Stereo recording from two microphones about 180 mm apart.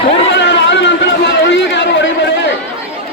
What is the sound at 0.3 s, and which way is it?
Run, 80° left.